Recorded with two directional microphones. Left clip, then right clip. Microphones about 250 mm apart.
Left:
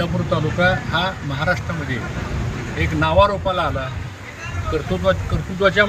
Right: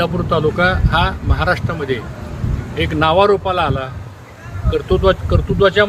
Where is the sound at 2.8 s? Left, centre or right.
Right.